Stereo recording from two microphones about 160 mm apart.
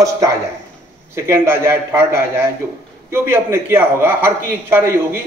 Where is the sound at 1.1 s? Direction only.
15° right (ahead or behind).